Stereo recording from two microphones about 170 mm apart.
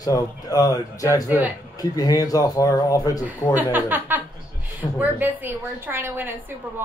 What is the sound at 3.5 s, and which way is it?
A woman's voice, 10° right (ahead or behind).